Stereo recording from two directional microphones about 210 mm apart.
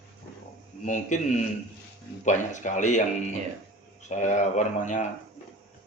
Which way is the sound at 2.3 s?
35° left (ahead or behind).